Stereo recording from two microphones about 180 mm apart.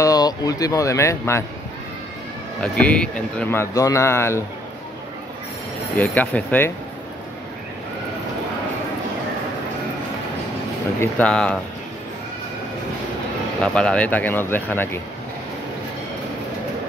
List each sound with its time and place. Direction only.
0.0 s speech: 20° left (ahead or behind)
2.6 s speech: 5° left (ahead or behind)
5.9 s speech: 10° left (ahead or behind)
11.0 s speech: 5° left (ahead or behind)
13.6 s speech: 5° left (ahead or behind)